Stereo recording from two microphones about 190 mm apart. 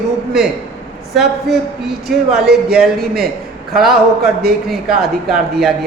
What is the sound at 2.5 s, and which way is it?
Speech, 55° right (ahead or behind).